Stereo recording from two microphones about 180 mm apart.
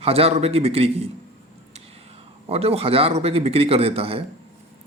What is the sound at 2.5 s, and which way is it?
Speech, 35° right (ahead or behind).